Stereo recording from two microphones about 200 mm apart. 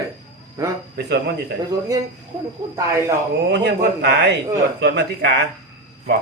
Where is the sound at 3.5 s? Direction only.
60° right (ahead or behind).